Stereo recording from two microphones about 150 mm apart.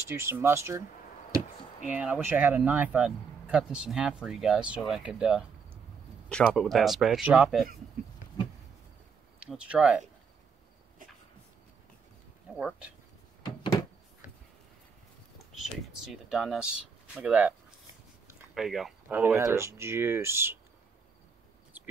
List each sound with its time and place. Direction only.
0.1 s speech: 15° right (ahead or behind)
1.9 s speech: 10° right (ahead or behind)
6.2 s speech: 5° left (ahead or behind)
9.4 s speech: 5° right (ahead or behind)
12.5 s speech: centre (ahead or behind)
13.6 s door: 20° left (ahead or behind)
15.6 s speech: centre (ahead or behind)
19.1 s speech: 15° right (ahead or behind)